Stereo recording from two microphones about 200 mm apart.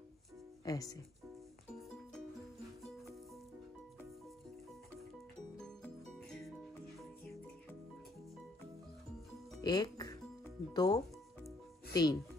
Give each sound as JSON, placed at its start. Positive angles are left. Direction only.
{"t": 0.7, "sound": "speech", "side_deg": 20}
{"t": 9.6, "sound": "music", "side_deg": 20}
{"t": 11.9, "sound": "speech", "side_deg": 20}